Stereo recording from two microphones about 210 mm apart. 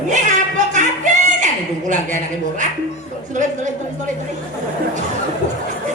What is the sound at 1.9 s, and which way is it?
Speech, 35° right (ahead or behind).